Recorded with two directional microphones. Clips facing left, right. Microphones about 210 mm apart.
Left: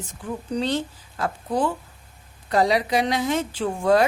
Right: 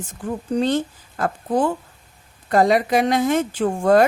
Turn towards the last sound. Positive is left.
turn(degrees=-50)  # may be behind; listen again after turning